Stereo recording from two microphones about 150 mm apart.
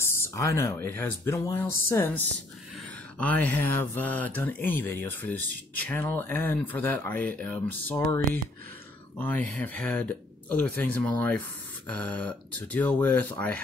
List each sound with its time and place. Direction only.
0.0 s speech: 15° left (ahead or behind)
9.2 s speech: 10° left (ahead or behind)